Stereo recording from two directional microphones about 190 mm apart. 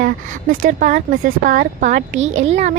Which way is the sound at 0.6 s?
40° right (ahead or behind).